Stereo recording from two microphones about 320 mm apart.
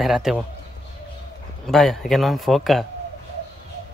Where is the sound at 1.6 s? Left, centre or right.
Centre.